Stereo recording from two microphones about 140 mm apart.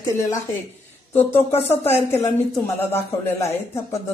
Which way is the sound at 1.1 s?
15° left (ahead or behind).